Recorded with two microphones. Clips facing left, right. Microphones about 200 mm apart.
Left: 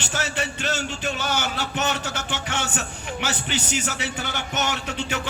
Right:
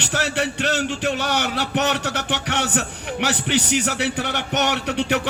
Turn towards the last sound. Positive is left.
turn(degrees=-65)  # may be behind; listen again after turning